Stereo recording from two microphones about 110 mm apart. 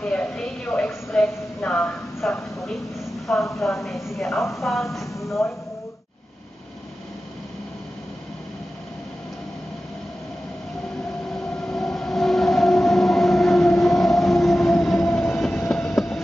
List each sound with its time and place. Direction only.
0.0 s a woman's voice: 10° left (ahead or behind)
3.5 s a woman's voice: centre (ahead or behind)
11.6 s train: 5° left (ahead or behind)
15.0 s train: 20° left (ahead or behind)
15.7 s train: 5° left (ahead or behind)